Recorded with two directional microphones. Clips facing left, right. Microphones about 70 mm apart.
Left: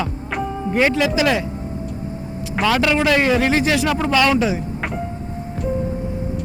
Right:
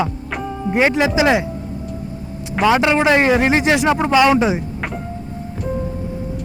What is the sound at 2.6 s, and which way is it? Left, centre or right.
Speech, right.